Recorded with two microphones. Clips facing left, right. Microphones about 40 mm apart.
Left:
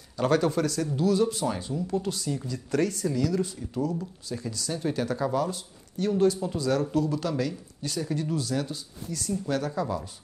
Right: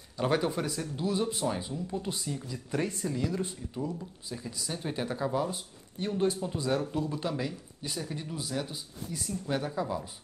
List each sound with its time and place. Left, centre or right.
0.2 s speech: centre
1.5 s speech: centre
2.0 s speech: right